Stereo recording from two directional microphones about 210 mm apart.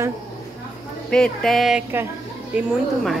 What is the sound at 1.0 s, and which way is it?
A woman's voice, 5° left (ahead or behind).